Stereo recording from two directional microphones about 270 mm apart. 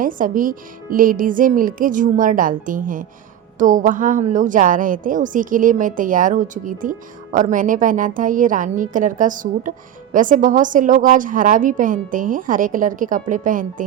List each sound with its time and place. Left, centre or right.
0.0 s a woman's voice: right